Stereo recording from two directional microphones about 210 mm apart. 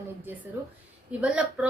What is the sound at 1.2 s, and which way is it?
Speech, 5° right (ahead or behind).